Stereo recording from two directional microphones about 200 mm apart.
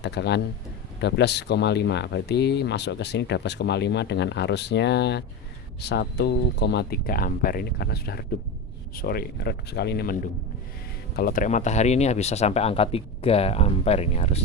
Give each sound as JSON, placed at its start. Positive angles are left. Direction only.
{"t": 0.0, "sound": "speech", "side_deg": 60}